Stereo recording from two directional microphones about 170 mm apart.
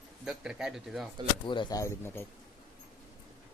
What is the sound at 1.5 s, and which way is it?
Speech, 25° left (ahead or behind).